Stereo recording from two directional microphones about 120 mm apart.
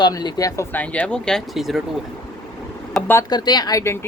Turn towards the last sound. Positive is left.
turn(degrees=25)  # may be behind; listen again after turning